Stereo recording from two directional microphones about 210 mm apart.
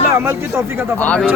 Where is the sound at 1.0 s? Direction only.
5° left (ahead or behind).